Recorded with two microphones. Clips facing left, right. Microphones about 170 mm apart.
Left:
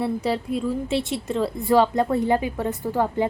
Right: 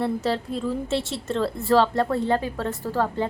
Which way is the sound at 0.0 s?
10° left (ahead or behind).